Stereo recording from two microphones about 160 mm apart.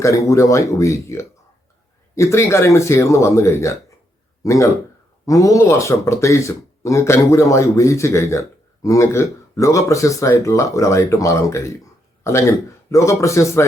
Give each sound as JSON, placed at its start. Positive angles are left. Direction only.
{"t": 0.0, "sound": "speech", "side_deg": 20}